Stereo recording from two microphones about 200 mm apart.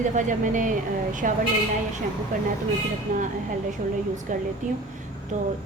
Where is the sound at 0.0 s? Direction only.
40° right (ahead or behind).